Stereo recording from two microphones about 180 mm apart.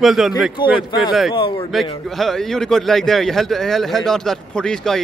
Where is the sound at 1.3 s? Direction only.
30° left (ahead or behind).